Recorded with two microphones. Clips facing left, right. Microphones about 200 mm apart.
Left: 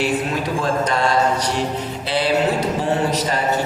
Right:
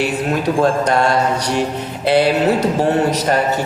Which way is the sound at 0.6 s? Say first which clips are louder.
Right 6 dB; 60° right (ahead or behind).